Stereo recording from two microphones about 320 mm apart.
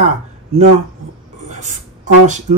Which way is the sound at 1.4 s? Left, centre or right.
Right.